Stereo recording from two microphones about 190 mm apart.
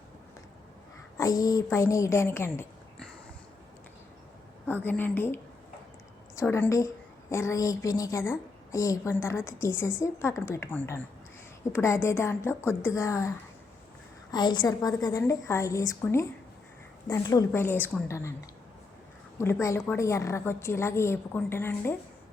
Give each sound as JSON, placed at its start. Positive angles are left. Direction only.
{"t": 1.1, "sound": "a woman's voice", "side_deg": 15}
{"t": 4.7, "sound": "a woman's voice", "side_deg": 10}
{"t": 19.4, "sound": "a woman's voice", "side_deg": 15}